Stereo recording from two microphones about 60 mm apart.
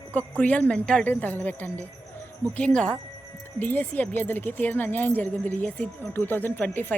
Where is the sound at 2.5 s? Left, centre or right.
Centre.